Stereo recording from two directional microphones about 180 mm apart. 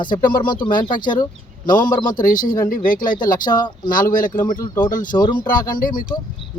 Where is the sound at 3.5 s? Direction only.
25° left (ahead or behind).